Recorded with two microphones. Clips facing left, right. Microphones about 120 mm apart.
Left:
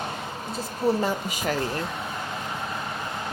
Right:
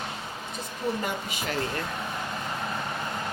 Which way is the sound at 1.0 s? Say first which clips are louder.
Left 5 dB; 40° left (ahead or behind).